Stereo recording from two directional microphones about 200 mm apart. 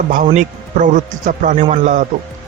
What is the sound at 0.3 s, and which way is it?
A man's voice, 40° right (ahead or behind).